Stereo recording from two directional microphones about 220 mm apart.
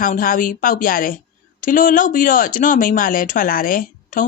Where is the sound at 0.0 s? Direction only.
40° left (ahead or behind).